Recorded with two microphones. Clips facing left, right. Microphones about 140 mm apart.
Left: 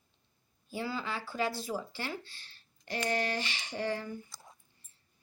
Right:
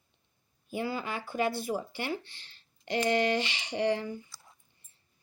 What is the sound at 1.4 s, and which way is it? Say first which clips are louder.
Speech: right 4 dB; 60° right (ahead or behind).